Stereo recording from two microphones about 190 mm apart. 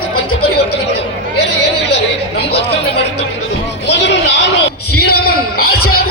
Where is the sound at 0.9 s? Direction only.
65° left (ahead or behind).